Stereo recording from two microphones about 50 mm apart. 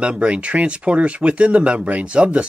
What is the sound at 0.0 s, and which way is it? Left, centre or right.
Speech, right.